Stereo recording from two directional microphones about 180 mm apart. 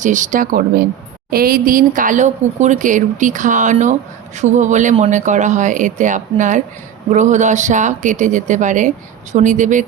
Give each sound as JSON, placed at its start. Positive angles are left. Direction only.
{"t": 0.0, "sound": "speech", "side_deg": -45}